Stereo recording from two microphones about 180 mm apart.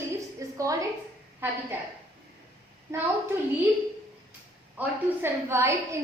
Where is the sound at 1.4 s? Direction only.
10° right (ahead or behind).